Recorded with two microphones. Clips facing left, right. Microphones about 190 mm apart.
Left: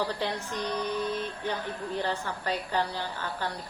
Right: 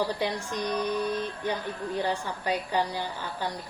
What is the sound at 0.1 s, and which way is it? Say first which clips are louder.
A woman's voice: right 2 dB; 15° right (ahead or behind).